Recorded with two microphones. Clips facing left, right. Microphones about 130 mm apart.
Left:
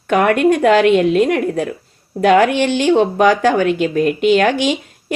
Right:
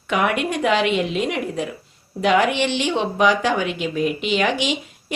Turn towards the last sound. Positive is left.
turn(degrees=50)  # may be behind; listen again after turning